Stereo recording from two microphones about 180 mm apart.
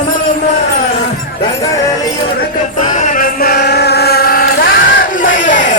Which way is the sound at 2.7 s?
40° left (ahead or behind).